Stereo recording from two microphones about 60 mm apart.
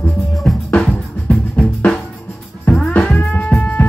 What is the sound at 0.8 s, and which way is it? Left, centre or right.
Music, left.